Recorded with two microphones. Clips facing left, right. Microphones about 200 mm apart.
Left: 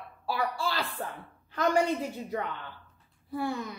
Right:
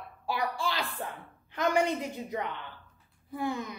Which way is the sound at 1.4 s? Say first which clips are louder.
Left 1 dB; 20° right (ahead or behind).